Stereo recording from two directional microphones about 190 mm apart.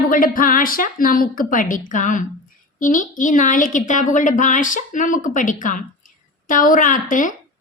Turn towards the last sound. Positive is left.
turn(degrees=45)  # may be behind; listen again after turning